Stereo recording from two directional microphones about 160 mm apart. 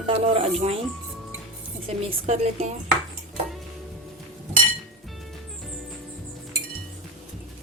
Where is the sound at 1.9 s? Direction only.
40° right (ahead or behind).